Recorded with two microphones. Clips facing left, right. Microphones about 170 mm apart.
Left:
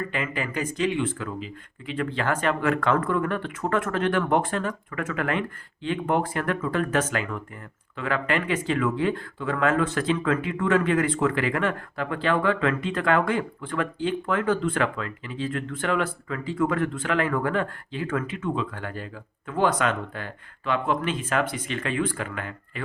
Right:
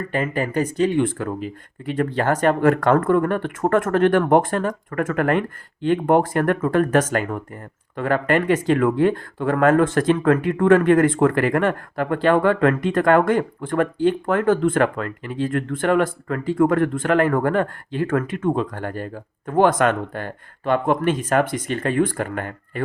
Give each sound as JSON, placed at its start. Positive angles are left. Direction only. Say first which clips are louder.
{"t": 0.1, "sound": "speech", "louder": "right 7 dB", "side_deg": -45}